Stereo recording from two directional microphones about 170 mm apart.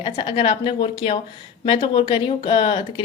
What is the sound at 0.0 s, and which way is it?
A woman's voice, 30° left (ahead or behind).